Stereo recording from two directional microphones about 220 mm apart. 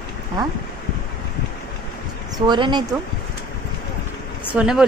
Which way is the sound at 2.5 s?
20° right (ahead or behind).